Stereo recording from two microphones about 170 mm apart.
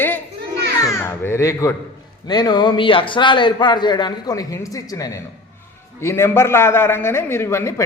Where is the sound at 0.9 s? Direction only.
15° left (ahead or behind).